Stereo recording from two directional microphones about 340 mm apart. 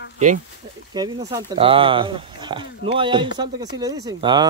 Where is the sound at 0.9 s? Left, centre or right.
Centre.